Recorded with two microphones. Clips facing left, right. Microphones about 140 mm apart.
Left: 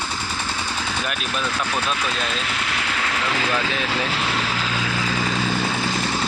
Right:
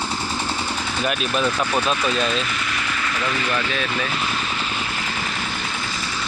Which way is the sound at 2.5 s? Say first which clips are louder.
Even; 85° left.